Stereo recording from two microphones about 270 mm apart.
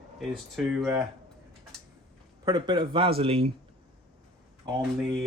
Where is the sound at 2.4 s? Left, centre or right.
Centre.